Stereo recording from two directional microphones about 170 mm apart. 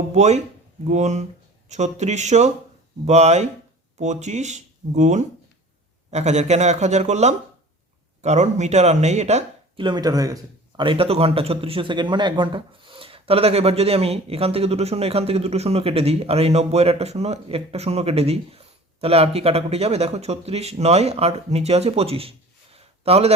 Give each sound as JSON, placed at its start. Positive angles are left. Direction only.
{"t": 0.1, "sound": "speech", "side_deg": -40}
{"t": 9.8, "sound": "speech", "side_deg": -25}